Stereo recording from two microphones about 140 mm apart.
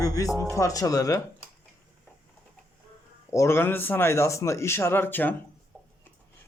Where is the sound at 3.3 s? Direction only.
20° left (ahead or behind).